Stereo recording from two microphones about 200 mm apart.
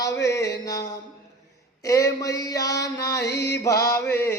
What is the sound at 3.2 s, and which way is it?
Music, 55° left (ahead or behind).